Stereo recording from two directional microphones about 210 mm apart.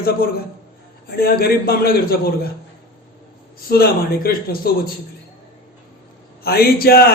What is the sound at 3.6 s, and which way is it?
A man's voice, 45° left (ahead or behind).